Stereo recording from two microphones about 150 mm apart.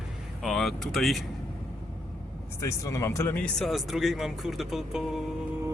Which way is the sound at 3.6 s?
Centre (ahead or behind).